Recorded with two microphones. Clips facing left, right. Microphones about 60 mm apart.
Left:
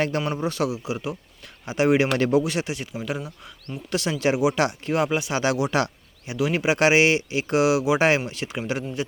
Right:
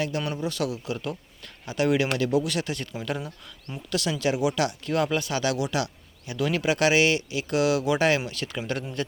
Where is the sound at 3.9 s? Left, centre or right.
Left.